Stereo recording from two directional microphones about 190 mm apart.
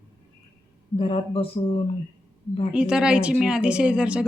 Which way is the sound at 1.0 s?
30° left (ahead or behind).